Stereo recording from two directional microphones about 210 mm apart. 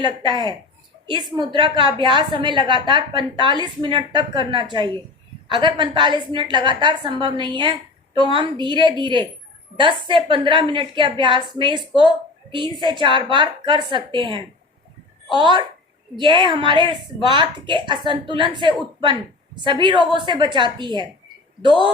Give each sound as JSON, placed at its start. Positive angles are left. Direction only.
{"t": 0.0, "sound": "a woman's voice", "side_deg": -20}